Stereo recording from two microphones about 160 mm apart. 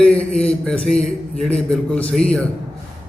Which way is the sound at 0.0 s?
5° left (ahead or behind).